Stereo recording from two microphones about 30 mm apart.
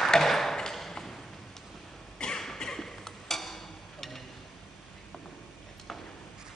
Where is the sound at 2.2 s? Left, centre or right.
Left.